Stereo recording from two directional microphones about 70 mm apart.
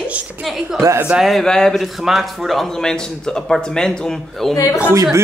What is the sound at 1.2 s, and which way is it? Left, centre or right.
Speech, centre.